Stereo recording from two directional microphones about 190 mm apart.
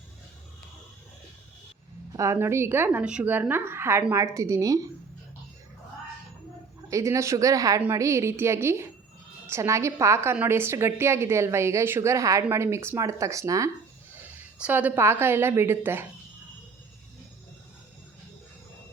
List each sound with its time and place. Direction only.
2.1 s a woman's voice: 15° right (ahead or behind)
6.8 s a woman's voice: 15° right (ahead or behind)